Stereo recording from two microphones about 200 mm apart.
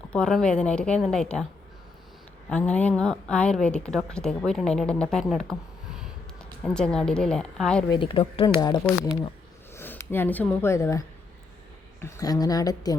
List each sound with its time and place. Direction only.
0.1 s a woman's voice: 5° left (ahead or behind)
2.5 s a woman's voice: 5° left (ahead or behind)
7.9 s speech: 25° left (ahead or behind)
8.9 s a woman's voice: 10° left (ahead or behind)